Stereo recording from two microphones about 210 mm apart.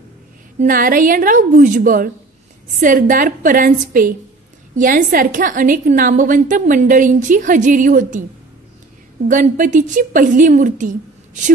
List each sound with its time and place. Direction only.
0.6 s a woman's voice: 40° right (ahead or behind)
9.3 s a woman's voice: 40° right (ahead or behind)